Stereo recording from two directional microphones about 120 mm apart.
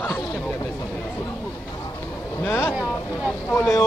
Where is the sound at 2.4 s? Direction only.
25° left (ahead or behind).